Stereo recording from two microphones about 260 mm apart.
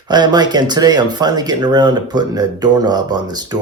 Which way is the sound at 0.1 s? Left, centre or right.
Centre.